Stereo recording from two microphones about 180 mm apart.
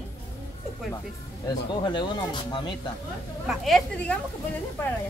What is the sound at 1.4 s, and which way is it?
Speech, 25° left (ahead or behind).